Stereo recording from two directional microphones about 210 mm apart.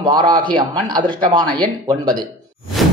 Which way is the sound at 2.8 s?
Centre (ahead or behind).